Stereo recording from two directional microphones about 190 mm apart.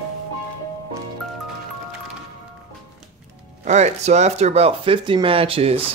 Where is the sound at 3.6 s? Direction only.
35° right (ahead or behind).